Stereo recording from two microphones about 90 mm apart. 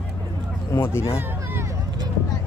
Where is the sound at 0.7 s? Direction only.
30° left (ahead or behind).